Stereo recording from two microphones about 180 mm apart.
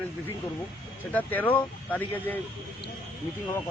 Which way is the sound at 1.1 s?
10° left (ahead or behind).